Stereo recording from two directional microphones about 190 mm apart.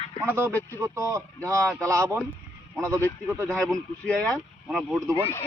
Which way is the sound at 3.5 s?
5° left (ahead or behind).